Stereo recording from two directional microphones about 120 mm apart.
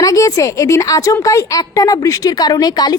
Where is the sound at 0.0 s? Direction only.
30° left (ahead or behind).